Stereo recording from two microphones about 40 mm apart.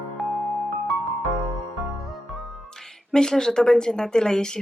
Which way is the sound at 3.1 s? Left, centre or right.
Centre.